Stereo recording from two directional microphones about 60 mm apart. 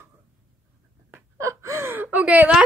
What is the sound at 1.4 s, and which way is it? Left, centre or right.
Gasp, right.